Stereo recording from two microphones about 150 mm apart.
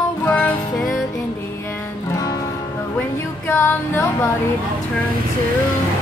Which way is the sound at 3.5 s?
15° left (ahead or behind).